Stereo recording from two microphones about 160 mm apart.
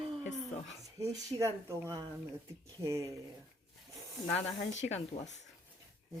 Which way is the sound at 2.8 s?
20° right (ahead or behind).